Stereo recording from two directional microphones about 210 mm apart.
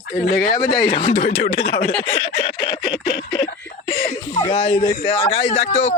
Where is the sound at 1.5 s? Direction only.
55° left (ahead or behind).